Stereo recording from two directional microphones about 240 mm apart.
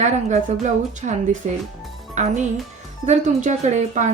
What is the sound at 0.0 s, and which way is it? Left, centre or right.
A woman's voice, right.